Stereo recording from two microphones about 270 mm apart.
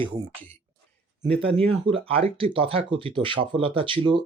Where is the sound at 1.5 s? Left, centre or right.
Centre.